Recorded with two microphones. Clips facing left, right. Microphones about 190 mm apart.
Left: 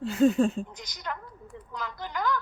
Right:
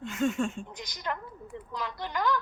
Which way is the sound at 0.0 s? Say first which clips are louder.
Left 7 dB; 35° left (ahead or behind).